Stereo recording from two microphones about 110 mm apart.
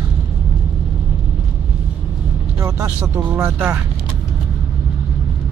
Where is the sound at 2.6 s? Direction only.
25° right (ahead or behind).